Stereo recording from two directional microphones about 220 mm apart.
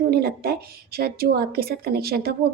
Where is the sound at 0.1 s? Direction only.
45° right (ahead or behind).